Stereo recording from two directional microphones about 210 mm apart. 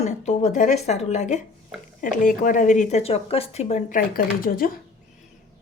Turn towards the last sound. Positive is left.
turn(degrees=40)  # may be behind; listen again after turning